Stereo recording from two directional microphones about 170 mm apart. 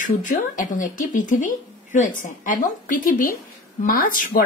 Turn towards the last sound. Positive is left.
turn(degrees=55)  # may be behind; listen again after turning